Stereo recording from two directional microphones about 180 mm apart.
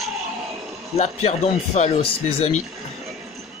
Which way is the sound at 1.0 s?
40° left (ahead or behind).